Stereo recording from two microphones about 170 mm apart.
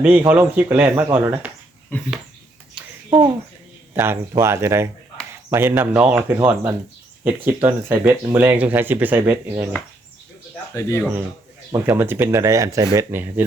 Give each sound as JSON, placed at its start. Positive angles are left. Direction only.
{"t": 0.0, "sound": "speech", "side_deg": -10}
{"t": 1.9, "sound": "speech", "side_deg": 10}
{"t": 2.7, "sound": "a sound", "side_deg": -10}
{"t": 3.9, "sound": "speech", "side_deg": -15}
{"t": 10.8, "sound": "speech", "side_deg": 15}
{"t": 11.7, "sound": "speech", "side_deg": -15}